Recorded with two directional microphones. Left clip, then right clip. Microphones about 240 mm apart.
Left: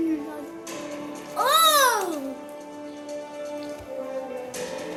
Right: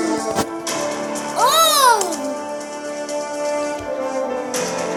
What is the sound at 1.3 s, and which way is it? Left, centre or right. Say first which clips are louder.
Music: right 4 dB; right.